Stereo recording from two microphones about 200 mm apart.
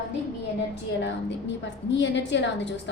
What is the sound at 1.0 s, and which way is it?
A woman's voice, 60° left (ahead or behind).